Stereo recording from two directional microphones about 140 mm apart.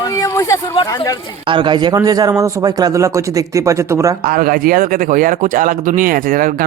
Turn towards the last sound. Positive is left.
turn(degrees=-85)